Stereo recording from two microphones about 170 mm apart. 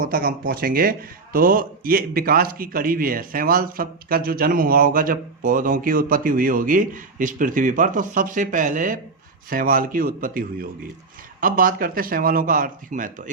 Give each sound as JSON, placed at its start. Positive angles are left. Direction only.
{"t": 0.0, "sound": "speech", "side_deg": -60}